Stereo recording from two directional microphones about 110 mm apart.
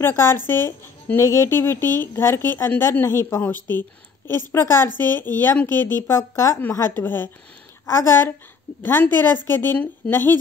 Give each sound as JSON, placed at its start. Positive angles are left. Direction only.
{"t": 0.0, "sound": "a woman's voice", "side_deg": 25}
{"t": 4.9, "sound": "a woman's voice", "side_deg": -40}
{"t": 5.2, "sound": "a woman's voice", "side_deg": 20}